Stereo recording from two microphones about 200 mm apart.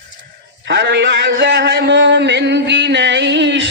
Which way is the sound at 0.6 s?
60° right (ahead or behind).